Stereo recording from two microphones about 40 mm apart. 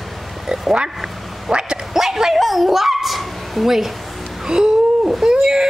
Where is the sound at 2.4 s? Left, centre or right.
Centre.